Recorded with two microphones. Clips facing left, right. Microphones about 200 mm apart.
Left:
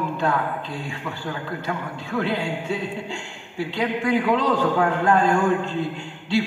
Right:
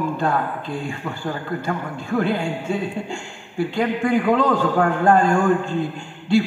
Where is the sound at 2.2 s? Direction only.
50° right (ahead or behind).